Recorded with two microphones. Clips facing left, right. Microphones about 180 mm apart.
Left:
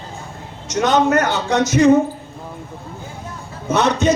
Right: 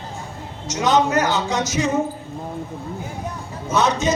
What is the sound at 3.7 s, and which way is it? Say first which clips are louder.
Speech: left 3 dB; 65° left (ahead or behind).